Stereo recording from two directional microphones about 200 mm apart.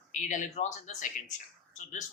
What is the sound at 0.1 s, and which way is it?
Speech, 40° left (ahead or behind).